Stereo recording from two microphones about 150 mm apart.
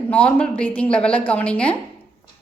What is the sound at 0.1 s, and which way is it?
A woman's voice, 10° left (ahead or behind).